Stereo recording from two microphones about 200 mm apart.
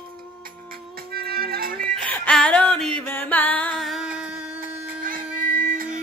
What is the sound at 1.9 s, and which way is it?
Music, 5° left (ahead or behind).